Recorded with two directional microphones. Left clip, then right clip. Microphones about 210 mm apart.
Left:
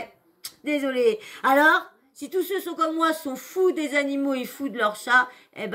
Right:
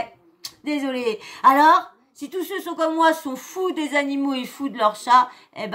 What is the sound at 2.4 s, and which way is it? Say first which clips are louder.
Speech: left 1 dB; 45° left (ahead or behind).